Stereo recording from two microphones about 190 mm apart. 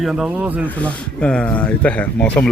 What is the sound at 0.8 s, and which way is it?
A man's voice, 5° left (ahead or behind).